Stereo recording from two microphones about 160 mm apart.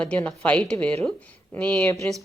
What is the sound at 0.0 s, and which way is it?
A woman's voice, 5° left (ahead or behind).